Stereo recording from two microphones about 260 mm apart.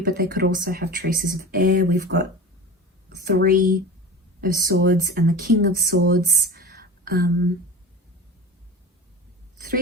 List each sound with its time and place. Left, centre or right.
0.0 s speech: right
3.2 s speech: right